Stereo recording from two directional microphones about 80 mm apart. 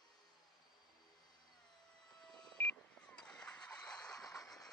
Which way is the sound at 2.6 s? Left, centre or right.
Centre.